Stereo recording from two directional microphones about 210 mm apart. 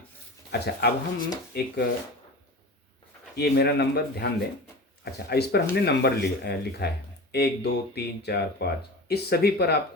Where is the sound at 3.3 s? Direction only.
50° left (ahead or behind).